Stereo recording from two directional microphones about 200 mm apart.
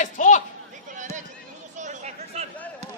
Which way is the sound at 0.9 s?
35° right (ahead or behind).